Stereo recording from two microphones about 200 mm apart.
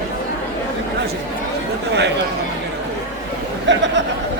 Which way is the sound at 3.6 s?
65° right (ahead or behind).